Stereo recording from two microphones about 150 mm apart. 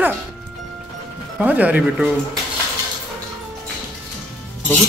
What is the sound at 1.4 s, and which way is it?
Speech, 10° right (ahead or behind).